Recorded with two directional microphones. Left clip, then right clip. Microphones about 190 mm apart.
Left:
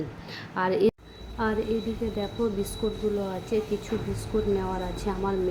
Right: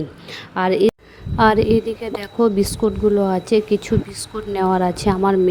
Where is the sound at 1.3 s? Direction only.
55° right (ahead or behind).